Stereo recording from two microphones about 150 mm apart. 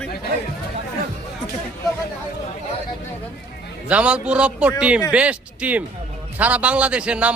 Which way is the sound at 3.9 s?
10° right (ahead or behind).